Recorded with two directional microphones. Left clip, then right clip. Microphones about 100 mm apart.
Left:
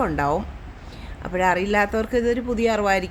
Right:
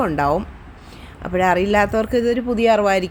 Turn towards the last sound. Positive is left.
turn(degrees=-20)  # may be behind; listen again after turning